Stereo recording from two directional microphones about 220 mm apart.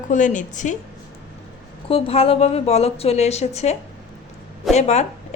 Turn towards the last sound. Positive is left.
turn(degrees=30)  # may be behind; listen again after turning